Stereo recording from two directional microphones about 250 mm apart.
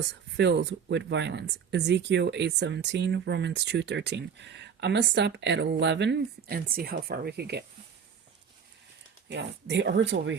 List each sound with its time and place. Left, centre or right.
0.3 s speech: right
9.3 s speech: right